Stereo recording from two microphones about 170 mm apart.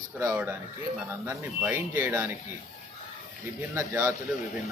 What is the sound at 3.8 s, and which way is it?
Speech, 15° right (ahead or behind).